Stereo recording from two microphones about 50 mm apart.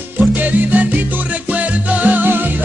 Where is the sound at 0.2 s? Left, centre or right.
Right.